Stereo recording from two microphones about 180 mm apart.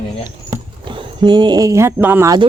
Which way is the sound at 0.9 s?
25° right (ahead or behind).